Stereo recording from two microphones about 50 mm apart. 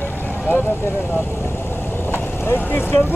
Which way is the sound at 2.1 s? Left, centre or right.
Left.